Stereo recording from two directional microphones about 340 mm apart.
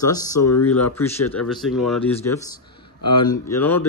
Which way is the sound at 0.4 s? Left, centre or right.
Left.